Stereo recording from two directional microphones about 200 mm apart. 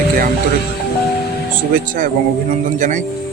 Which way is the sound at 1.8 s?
45° right (ahead or behind).